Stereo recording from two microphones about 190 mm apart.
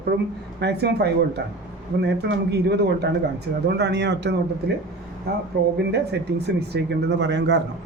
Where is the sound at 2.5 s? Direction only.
60° right (ahead or behind).